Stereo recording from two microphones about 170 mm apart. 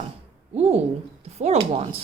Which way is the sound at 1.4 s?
40° right (ahead or behind).